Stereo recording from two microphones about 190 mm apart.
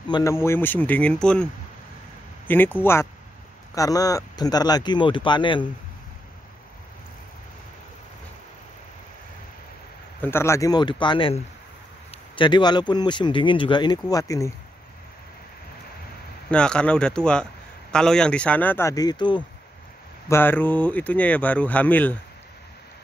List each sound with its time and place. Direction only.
0.1 s speech: 15° left (ahead or behind)
10.2 s speech: 15° left (ahead or behind)
16.4 s speech: 5° left (ahead or behind); by 19.4 s 25° left (ahead or behind)
20.2 s speech: 10° left (ahead or behind)